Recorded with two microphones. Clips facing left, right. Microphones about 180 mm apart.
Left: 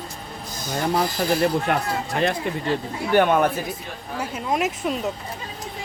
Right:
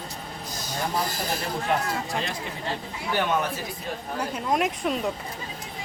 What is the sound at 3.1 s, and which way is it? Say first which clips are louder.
Speech: left 8 dB; 55° left (ahead or behind).